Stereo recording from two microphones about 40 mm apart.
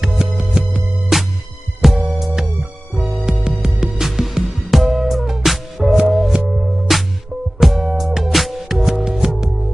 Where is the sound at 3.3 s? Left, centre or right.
Centre.